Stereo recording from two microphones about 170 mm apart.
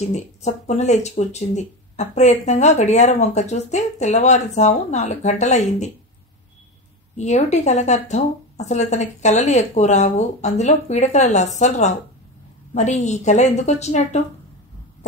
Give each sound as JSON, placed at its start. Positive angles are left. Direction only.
{"t": 0.1, "sound": "speech", "side_deg": 45}
{"t": 7.2, "sound": "a woman's voice", "side_deg": 40}